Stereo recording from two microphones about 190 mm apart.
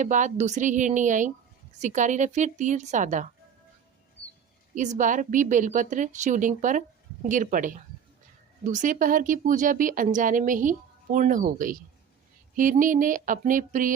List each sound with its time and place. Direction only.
0.0 s speech: 40° right (ahead or behind)
4.7 s speech: 40° right (ahead or behind)